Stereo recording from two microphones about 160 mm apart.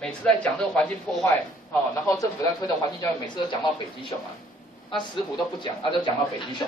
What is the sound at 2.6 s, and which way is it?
Speech, 25° left (ahead or behind).